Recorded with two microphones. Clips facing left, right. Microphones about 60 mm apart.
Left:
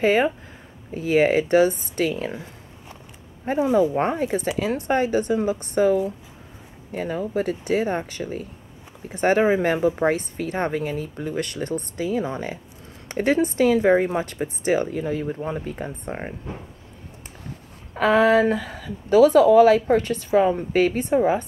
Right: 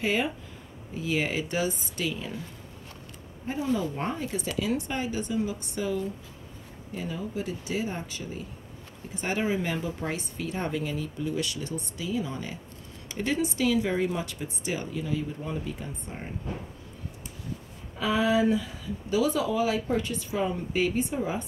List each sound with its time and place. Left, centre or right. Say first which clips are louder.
0.0 s speech: left 9 dB; left
3.9 s speech: left 9 dB; left
17.9 s speech: left 8 dB; left